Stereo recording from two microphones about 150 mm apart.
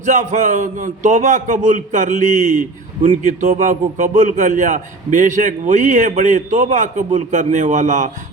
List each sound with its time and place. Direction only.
0.0 s a man's voice: 55° right (ahead or behind)